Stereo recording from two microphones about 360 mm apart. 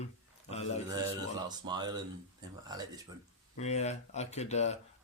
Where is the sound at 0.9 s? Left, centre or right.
Centre.